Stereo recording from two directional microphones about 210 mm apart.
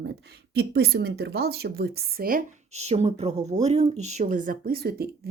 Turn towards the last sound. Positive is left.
turn(degrees=-45)  # may be behind; listen again after turning